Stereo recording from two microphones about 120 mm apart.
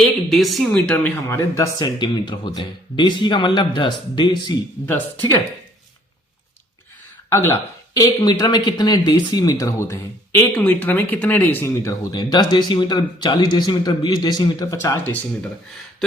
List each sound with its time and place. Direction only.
0.0 s speech: centre (ahead or behind)
1.3 s speech: 25° left (ahead or behind)
2.0 s speech: 40° left (ahead or behind)
7.3 s speech: 20° left (ahead or behind)
8.0 s speech: 35° left (ahead or behind)
12.1 s speech: 35° left (ahead or behind)
14.8 s speech: 20° left (ahead or behind)